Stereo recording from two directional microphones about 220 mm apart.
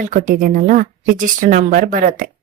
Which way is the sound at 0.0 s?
35° right (ahead or behind).